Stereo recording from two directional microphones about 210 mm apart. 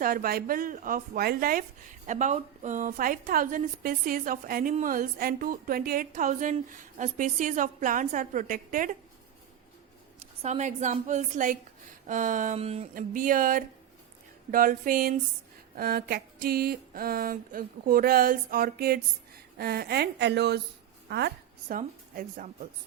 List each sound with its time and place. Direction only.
0.0 s a sound: 40° right (ahead or behind)
2.0 s a woman's voice: 35° right (ahead or behind)
10.2 s a woman's voice: 30° right (ahead or behind)
12.9 s a woman's voice: 40° right (ahead or behind)
14.5 s a sound: 40° right (ahead or behind)
21.1 s a woman's voice: 50° right (ahead or behind)